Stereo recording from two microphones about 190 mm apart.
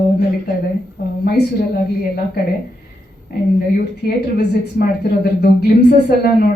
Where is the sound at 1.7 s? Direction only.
55° left (ahead or behind).